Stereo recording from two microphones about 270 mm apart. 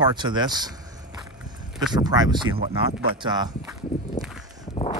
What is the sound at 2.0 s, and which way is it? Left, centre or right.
Speech, centre.